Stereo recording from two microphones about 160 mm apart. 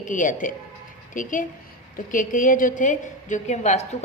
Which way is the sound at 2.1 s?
55° left (ahead or behind).